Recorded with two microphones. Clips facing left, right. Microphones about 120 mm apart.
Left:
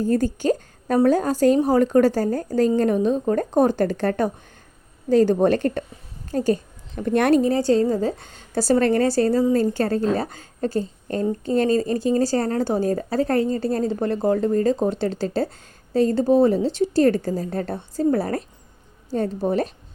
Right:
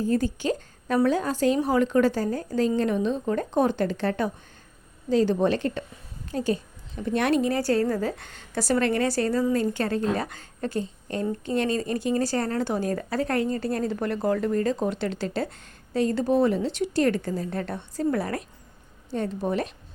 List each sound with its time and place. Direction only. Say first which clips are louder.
0.0 s a woman's voice: left 4 dB; 45° left (ahead or behind)
7.6 s a woman's voice: left 5 dB; 25° left (ahead or behind)
8.2 s a woman's voice: left 5 dB; 35° left (ahead or behind)